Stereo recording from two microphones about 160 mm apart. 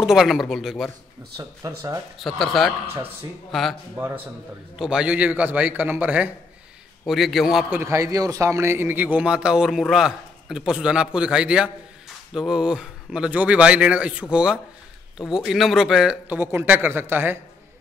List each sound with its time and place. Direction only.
0.0 s speech: centre (ahead or behind)
1.4 s speech: 20° right (ahead or behind)
2.1 s speech: centre (ahead or behind)
3.9 s a man's voice: 15° right (ahead or behind)
4.7 s a man's voice: 5° right (ahead or behind)
7.8 s a man's voice: 20° right (ahead or behind)